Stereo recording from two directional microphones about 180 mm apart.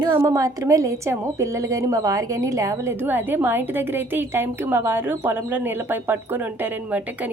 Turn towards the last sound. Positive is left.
turn(degrees=-10)  # may be behind; listen again after turning